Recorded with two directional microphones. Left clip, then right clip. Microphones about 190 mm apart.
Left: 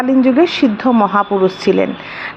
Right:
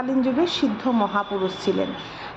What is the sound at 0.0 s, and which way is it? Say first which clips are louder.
Speech: left 10 dB; 25° left (ahead or behind).